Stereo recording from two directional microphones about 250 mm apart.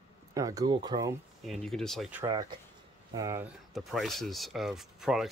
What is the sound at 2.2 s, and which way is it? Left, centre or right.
Speech, centre.